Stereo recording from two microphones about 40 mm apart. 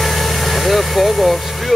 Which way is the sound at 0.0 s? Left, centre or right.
Centre.